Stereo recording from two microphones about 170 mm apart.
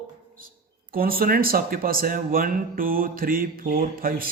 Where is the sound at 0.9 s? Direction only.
60° right (ahead or behind).